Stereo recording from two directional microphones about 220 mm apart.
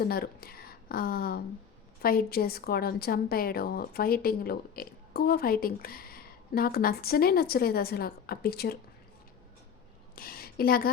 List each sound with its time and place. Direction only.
0.0 s a woman's voice: 45° left (ahead or behind)
10.2 s a woman's voice: 40° left (ahead or behind)